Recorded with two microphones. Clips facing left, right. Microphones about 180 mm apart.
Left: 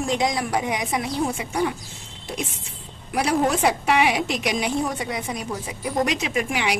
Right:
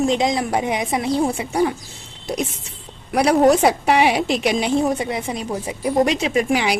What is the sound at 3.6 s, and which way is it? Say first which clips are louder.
A woman's voice: right 4 dB; 35° right (ahead or behind).